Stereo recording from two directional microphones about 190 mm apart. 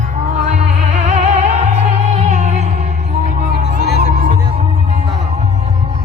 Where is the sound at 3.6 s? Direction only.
60° left (ahead or behind).